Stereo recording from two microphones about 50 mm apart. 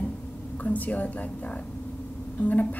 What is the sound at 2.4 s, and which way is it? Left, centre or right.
Speech, left.